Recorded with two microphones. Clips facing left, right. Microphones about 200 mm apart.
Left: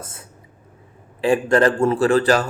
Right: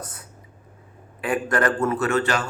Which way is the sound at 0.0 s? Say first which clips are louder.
Even; 25° left (ahead or behind).